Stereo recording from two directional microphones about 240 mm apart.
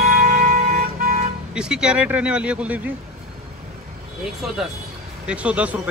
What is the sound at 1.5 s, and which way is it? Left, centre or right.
Speech, centre.